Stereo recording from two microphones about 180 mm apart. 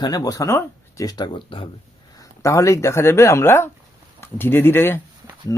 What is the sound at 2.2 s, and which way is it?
Speech, 15° left (ahead or behind).